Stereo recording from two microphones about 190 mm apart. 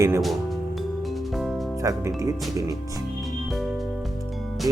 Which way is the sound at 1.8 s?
15° right (ahead or behind).